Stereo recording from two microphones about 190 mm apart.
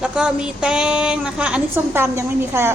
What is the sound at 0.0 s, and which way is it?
A woman's voice, 5° right (ahead or behind).